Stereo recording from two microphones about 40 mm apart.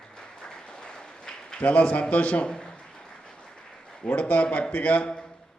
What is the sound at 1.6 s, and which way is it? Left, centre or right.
Speech, left.